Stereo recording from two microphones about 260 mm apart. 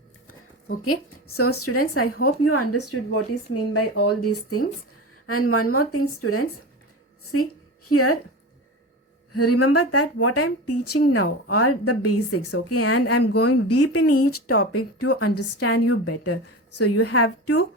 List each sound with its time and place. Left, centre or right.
0.9 s speech: left
7.9 s speech: left
9.3 s speech: left